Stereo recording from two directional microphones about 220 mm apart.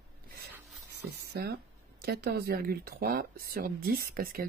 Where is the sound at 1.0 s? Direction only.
45° right (ahead or behind).